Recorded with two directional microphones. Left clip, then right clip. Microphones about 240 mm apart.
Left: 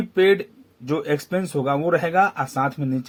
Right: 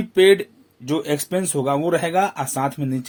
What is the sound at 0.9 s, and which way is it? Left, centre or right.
A man's voice, right.